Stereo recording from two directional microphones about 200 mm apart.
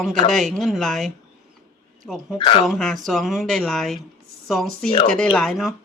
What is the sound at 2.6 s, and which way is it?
Speech, centre (ahead or behind).